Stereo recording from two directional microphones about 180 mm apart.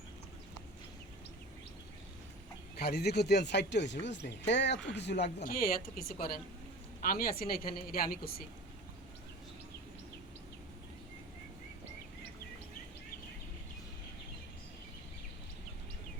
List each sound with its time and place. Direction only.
2.7 s speech: 65° left (ahead or behind)
5.4 s speech: 55° left (ahead or behind)